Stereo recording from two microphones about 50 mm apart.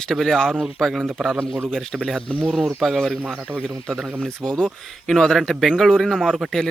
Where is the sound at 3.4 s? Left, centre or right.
Right.